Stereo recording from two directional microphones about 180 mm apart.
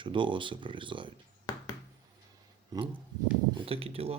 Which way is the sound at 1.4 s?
20° left (ahead or behind).